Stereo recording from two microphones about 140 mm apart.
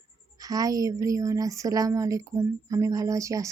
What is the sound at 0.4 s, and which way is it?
Speech, 25° right (ahead or behind).